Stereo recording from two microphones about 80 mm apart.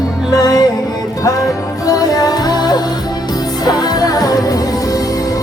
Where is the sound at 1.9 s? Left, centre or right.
Left.